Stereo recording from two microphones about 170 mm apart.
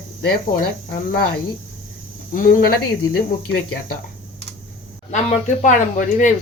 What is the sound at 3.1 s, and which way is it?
Cricket, 70° left (ahead or behind).